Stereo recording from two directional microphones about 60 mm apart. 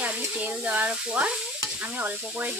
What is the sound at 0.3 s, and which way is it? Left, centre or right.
Stir, right.